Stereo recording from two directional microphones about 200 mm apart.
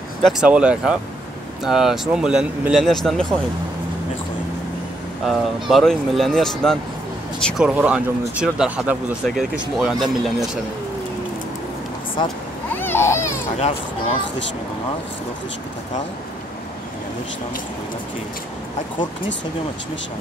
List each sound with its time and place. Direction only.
0.2 s speech: 5° right (ahead or behind)
5.2 s speech: centre (ahead or behind)
12.7 s a sound: 10° left (ahead or behind)
13.6 s speech: 30° left (ahead or behind)